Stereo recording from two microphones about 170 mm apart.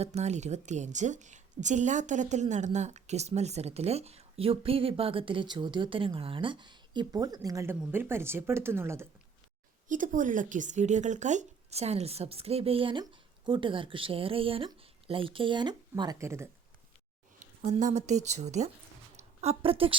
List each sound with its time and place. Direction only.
0.0 s a woman's voice: 40° right (ahead or behind); by 9.0 s 15° right (ahead or behind)
9.9 s a woman's voice: 50° right (ahead or behind); by 16.5 s 15° right (ahead or behind)
17.6 s a woman's voice: 45° right (ahead or behind)